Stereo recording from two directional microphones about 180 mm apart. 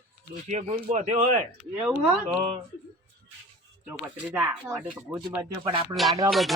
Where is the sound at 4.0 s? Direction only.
5° right (ahead or behind).